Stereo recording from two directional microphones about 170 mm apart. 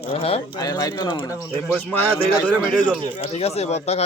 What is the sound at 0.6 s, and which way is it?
Speech, 20° left (ahead or behind).